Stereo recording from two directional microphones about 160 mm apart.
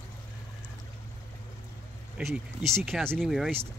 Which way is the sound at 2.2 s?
Centre (ahead or behind).